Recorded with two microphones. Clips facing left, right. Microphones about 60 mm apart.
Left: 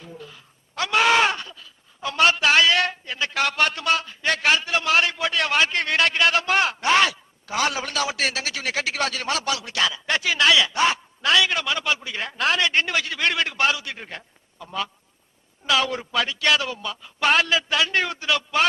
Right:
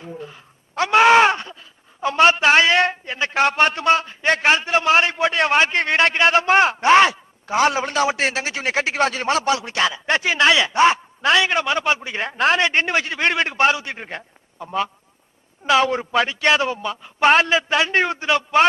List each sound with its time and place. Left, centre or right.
0.0 s speech: right